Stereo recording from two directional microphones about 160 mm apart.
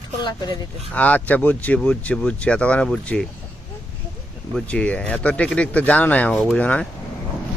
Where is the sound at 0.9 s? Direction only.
10° left (ahead or behind).